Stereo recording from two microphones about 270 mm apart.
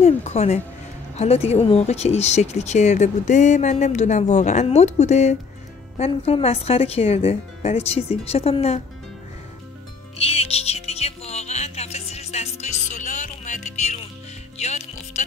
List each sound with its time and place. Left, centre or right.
0.0 s a sound: left
1.1 s speech: left
10.1 s music: left